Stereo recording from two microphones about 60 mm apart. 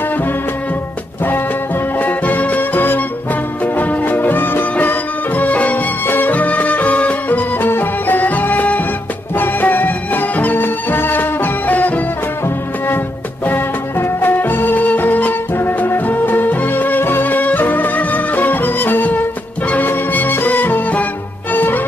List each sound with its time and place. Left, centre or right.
2.0 s music: left
13.5 s music: left